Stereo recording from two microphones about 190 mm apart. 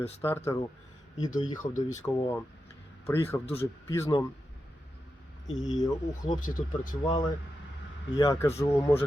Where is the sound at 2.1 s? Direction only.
15° left (ahead or behind).